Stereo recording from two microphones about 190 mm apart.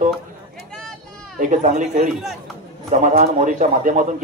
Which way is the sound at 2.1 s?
Centre (ahead or behind).